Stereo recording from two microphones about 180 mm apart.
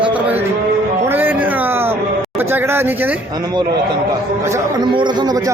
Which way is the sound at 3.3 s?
20° right (ahead or behind).